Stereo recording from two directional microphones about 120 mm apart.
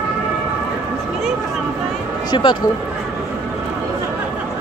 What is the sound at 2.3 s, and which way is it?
Speech, 40° left (ahead or behind).